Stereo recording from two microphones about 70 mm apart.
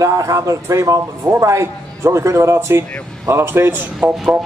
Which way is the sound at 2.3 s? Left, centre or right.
Right.